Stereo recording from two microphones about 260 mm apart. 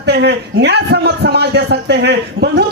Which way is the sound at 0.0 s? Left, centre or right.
Right.